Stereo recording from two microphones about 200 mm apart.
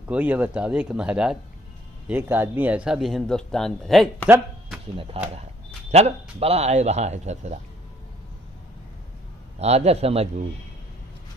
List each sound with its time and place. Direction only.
0.1 s speech: 10° right (ahead or behind)
5.2 s a man's voice: 30° right (ahead or behind)
9.6 s a man's voice: 30° right (ahead or behind)